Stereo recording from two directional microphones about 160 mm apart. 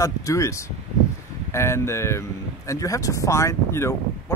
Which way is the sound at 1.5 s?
15° left (ahead or behind).